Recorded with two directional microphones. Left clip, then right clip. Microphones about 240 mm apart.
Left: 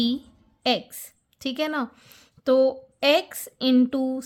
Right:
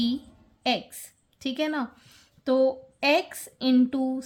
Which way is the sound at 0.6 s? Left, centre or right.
Left.